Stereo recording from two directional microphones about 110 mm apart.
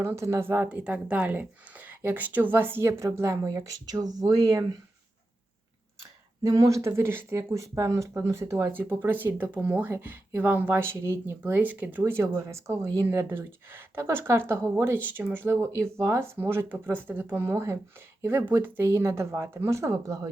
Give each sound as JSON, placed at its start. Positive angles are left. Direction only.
{"t": 0.0, "sound": "a woman's voice", "side_deg": -25}
{"t": 6.4, "sound": "speech", "side_deg": -30}